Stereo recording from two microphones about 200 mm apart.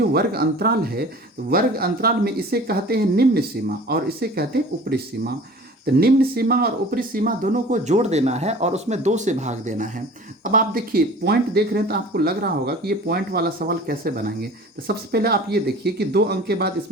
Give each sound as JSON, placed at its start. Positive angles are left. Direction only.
{"t": 0.0, "sound": "speech", "side_deg": -50}